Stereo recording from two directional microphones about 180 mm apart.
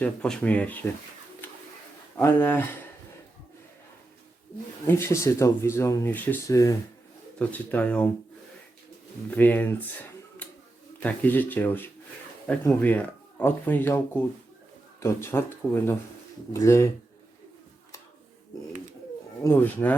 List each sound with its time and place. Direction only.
0.0 s speech: 5° left (ahead or behind)
1.4 s a sound: 10° left (ahead or behind)
2.1 s speech: 10° left (ahead or behind)
4.9 s speech: 15° left (ahead or behind)
9.3 s speech: 10° left (ahead or behind)
19.4 s speech: 15° left (ahead or behind)